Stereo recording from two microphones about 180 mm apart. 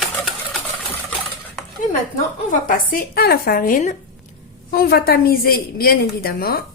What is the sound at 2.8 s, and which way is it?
A woman's voice, 55° left (ahead or behind).